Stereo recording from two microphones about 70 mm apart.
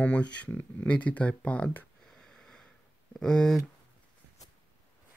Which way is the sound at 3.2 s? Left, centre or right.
Centre.